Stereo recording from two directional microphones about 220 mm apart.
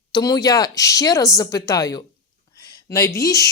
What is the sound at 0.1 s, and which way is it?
Speech, 15° left (ahead or behind).